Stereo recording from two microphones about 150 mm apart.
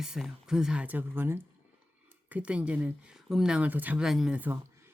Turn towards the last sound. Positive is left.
turn(degrees=-10)  # may be behind; listen again after turning